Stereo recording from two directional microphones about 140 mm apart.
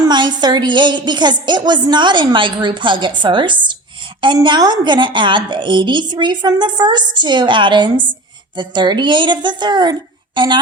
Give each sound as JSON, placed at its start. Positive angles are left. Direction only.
{"t": 0.0, "sound": "a woman's voice", "side_deg": -30}